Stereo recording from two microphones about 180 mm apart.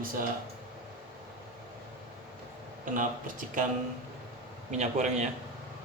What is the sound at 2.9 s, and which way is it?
Speech, 50° right (ahead or behind).